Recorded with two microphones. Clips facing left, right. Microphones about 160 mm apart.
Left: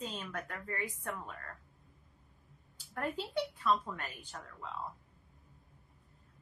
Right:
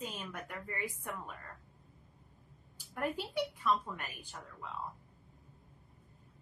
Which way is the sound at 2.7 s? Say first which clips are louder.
Right 1 dB; 10° right (ahead or behind).